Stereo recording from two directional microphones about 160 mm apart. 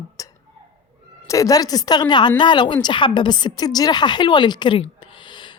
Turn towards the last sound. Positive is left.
turn(degrees=30)  # may be behind; listen again after turning